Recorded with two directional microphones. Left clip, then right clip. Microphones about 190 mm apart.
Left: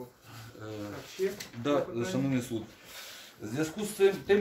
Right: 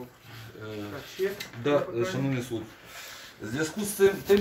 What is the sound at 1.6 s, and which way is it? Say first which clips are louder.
Speech: right 4 dB; 60° left (ahead or behind).